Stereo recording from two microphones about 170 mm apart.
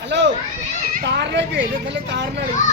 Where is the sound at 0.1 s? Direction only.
90° right.